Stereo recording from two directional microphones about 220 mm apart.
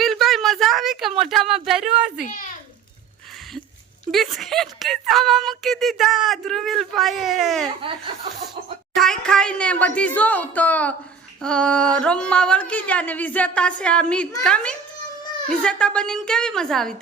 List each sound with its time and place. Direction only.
0.0 s a sound: centre (ahead or behind)
1.2 s speech: centre (ahead or behind)
4.1 s speech: centre (ahead or behind)
7.8 s speech: 25° right (ahead or behind)
9.0 s speech: 5° left (ahead or behind)